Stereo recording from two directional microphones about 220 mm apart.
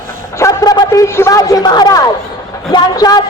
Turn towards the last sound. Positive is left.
turn(degrees=15)  # may be behind; listen again after turning